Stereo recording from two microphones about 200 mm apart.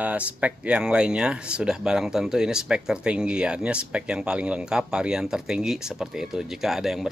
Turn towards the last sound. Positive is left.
turn(degrees=0)  # may be behind; listen again after turning